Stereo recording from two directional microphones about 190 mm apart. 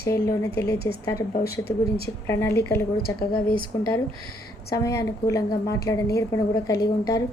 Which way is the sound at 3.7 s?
15° left (ahead or behind).